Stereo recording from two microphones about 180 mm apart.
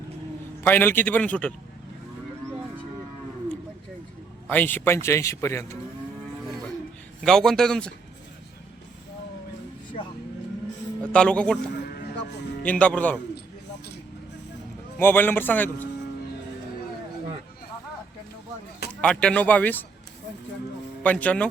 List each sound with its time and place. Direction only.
0.6 s a man's voice: 10° left (ahead or behind)
4.4 s a man's voice: 10° left (ahead or behind)
7.3 s a man's voice: 5° left (ahead or behind)
11.0 s a man's voice: 5° left (ahead or behind)
12.6 s a man's voice: 5° left (ahead or behind)
14.9 s a man's voice: 10° left (ahead or behind)
19.0 s a man's voice: 5° left (ahead or behind)
21.0 s a man's voice: 10° left (ahead or behind)